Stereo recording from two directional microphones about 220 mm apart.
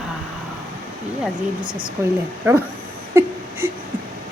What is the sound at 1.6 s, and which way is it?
Speech, 20° right (ahead or behind).